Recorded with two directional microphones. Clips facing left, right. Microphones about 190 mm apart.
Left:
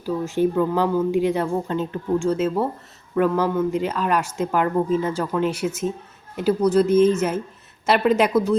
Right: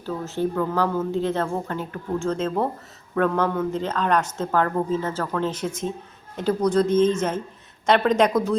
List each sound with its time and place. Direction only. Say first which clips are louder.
0.0 s speech: left 5 dB; 15° left (ahead or behind)